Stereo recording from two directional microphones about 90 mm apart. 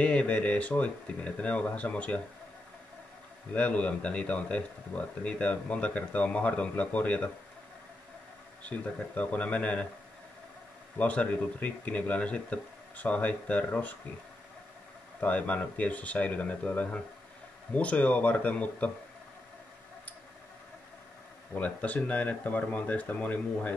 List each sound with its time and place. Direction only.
0.0 s speech: 15° left (ahead or behind)
3.5 s speech: 15° left (ahead or behind)
8.6 s speech: 15° left (ahead or behind)
11.0 s speech: 15° left (ahead or behind)
15.1 s speech: 15° left (ahead or behind)
21.5 s speech: 15° left (ahead or behind)